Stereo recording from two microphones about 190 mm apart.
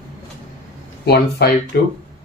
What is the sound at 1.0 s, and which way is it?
Speech, 55° left (ahead or behind).